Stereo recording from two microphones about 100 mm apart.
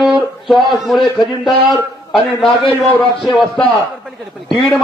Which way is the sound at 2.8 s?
Centre (ahead or behind).